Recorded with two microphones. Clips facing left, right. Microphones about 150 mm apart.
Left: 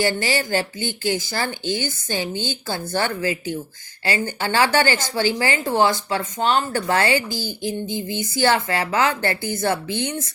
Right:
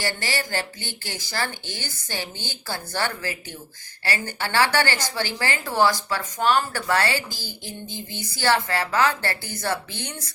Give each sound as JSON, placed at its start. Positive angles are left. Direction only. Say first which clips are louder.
{"t": 0.0, "sound": "a woman's voice", "louder": "left 7 dB", "side_deg": 20}